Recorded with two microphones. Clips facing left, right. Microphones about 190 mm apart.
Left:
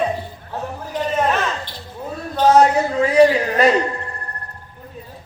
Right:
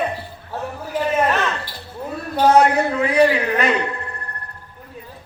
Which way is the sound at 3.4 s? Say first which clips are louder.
Left 4 dB; 35° left (ahead or behind).